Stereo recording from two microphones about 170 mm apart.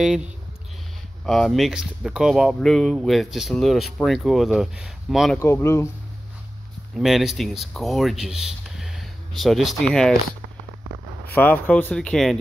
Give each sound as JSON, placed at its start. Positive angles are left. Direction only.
{"t": 0.0, "sound": "speech", "side_deg": -5}
{"t": 5.4, "sound": "speech", "side_deg": 15}
{"t": 7.0, "sound": "speech", "side_deg": 0}
{"t": 11.3, "sound": "speech", "side_deg": 10}